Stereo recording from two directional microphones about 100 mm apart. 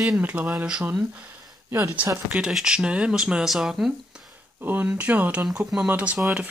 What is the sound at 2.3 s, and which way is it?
Speech, 10° right (ahead or behind).